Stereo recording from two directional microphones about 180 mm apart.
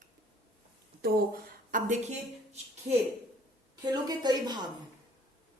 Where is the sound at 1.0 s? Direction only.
55° right (ahead or behind).